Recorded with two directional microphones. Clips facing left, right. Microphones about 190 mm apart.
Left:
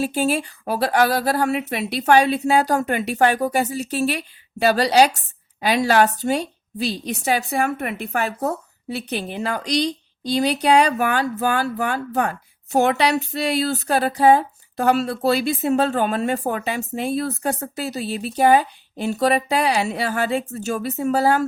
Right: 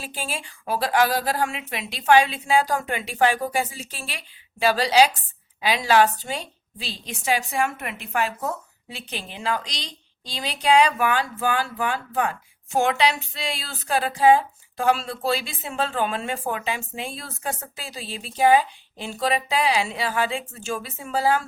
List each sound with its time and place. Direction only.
0.0 s speech: 45° left (ahead or behind)